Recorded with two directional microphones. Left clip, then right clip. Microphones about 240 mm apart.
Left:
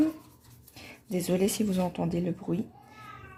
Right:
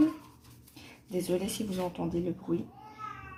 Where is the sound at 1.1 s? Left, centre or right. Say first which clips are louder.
Left 4 dB; left.